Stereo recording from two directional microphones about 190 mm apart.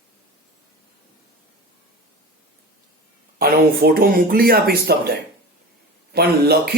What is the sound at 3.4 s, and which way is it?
Speech, 55° right (ahead or behind).